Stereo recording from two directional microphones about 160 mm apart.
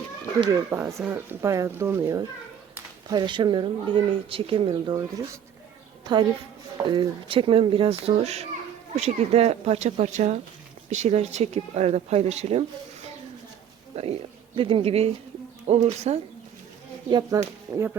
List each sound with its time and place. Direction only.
0.5 s speech: 15° right (ahead or behind)
6.8 s speech: 30° right (ahead or behind)
13.9 s speech: 40° right (ahead or behind)
17.1 s speech: 25° right (ahead or behind)